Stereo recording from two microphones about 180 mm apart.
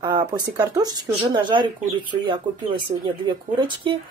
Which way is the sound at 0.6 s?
20° right (ahead or behind).